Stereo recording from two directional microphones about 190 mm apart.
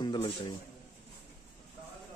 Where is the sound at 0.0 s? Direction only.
20° left (ahead or behind).